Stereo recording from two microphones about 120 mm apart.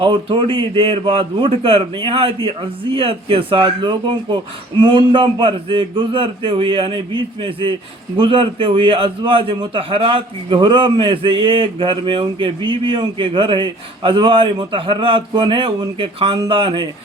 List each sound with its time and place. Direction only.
0.0 s a man's voice: 45° right (ahead or behind)